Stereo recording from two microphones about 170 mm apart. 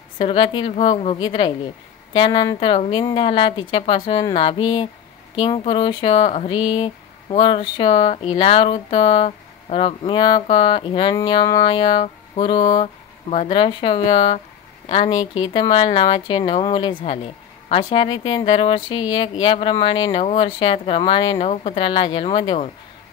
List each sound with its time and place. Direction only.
0.2 s speech: 30° left (ahead or behind)
12.8 s speech: 40° left (ahead or behind)
14.1 s speech: 40° left (ahead or behind)
14.9 s speech: 30° left (ahead or behind)